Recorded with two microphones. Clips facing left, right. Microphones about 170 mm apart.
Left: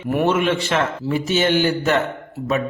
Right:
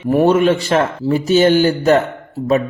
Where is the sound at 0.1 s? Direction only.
35° right (ahead or behind).